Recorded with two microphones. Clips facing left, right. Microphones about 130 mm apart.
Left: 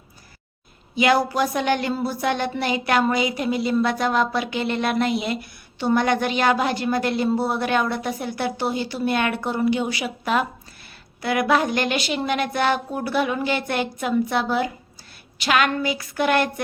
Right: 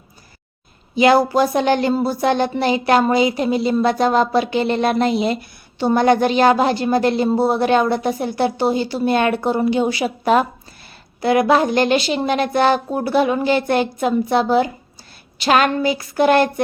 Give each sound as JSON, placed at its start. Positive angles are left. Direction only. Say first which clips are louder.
{"t": 0.9, "sound": "speech", "louder": "right 6 dB", "side_deg": -30}